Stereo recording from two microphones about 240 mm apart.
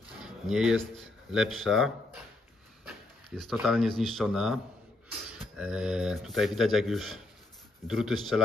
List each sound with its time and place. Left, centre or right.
0.2 s a sound: centre
0.9 s speech: centre
3.3 s speech: centre
5.6 s speech: centre